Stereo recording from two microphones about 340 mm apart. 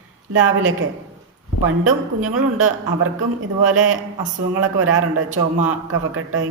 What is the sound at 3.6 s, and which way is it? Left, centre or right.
Speech, right.